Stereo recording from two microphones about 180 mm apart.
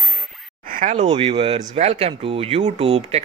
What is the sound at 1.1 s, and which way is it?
Speech, 30° right (ahead or behind).